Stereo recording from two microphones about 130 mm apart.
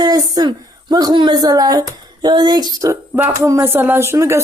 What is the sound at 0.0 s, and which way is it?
Speech, 30° right (ahead or behind).